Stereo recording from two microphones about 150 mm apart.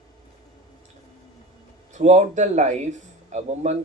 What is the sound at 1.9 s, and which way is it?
Speech, 50° right (ahead or behind).